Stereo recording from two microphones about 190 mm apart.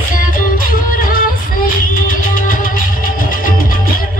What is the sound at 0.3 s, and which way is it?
Music, 45° left (ahead or behind).